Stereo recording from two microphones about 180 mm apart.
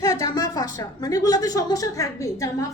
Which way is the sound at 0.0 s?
15° left (ahead or behind).